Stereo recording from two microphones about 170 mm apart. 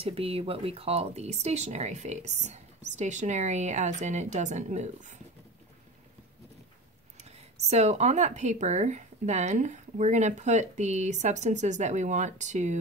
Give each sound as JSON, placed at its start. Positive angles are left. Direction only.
{"t": 0.0, "sound": "speech", "side_deg": -35}
{"t": 7.2, "sound": "speech", "side_deg": -40}